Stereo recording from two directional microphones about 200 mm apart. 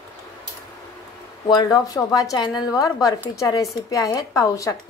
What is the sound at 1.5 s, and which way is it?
A woman's voice, 20° left (ahead or behind).